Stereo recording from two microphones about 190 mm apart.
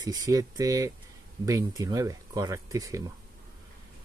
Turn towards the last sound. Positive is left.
turn(degrees=-15)  # may be behind; listen again after turning